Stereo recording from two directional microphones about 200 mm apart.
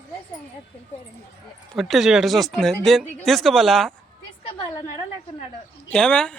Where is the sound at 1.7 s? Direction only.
Centre (ahead or behind).